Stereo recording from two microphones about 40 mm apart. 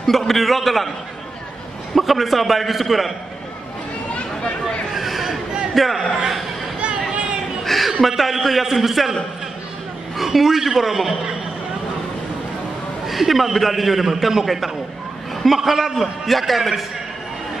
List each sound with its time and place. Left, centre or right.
0.3 s a man's voice: centre
2.0 s a man's voice: centre
4.1 s a sound: left
4.9 s a sound: centre
5.8 s a man's voice: centre
7.6 s chuckle: centre
8.1 s a man's voice: centre
10.1 s a man's voice: centre
13.0 s a man's voice: centre